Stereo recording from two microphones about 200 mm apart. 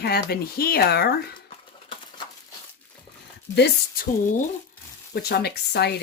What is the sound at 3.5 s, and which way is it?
Speech, 55° left (ahead or behind).